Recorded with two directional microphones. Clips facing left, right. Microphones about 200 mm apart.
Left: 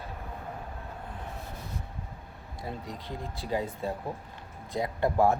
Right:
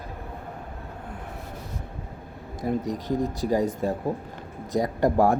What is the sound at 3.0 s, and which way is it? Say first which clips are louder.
Speech: right 10 dB; 45° right (ahead or behind).